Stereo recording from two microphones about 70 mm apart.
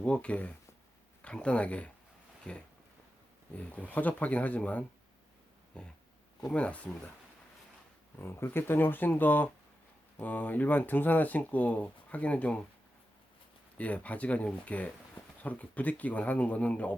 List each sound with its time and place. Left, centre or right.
0.0 s speech: centre
8.2 s speech: left; by 12.6 s centre
13.7 s speech: left